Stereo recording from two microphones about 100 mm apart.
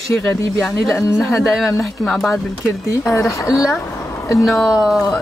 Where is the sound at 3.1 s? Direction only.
30° left (ahead or behind).